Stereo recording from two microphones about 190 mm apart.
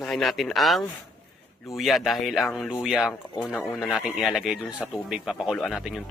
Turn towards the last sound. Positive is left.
turn(degrees=0)  # may be behind; listen again after turning